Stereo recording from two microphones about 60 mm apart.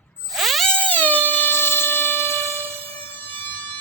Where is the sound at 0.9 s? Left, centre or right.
Left.